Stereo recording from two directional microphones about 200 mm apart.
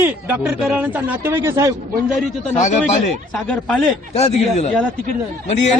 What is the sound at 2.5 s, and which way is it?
Speech, 35° left (ahead or behind).